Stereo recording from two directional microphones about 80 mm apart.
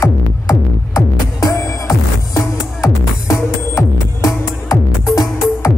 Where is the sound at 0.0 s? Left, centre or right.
Left.